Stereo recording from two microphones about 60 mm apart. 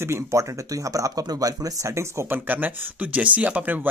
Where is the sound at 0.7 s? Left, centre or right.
Right.